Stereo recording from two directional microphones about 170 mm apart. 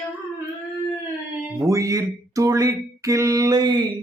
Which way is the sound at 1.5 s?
20° right (ahead or behind).